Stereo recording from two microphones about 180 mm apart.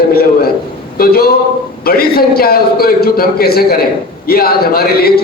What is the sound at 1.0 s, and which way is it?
A man's voice, 55° left (ahead or behind).